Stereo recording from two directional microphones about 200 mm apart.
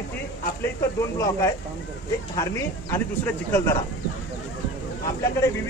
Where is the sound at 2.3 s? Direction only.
15° left (ahead or behind).